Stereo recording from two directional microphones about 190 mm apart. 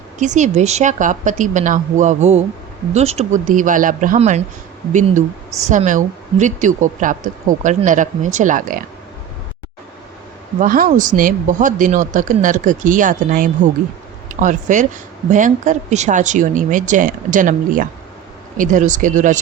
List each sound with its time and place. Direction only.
0.2 s a woman's voice: 40° right (ahead or behind)
10.6 s a woman's voice: 45° right (ahead or behind)